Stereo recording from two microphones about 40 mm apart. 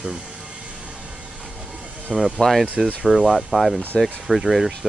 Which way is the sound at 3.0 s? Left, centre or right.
Centre.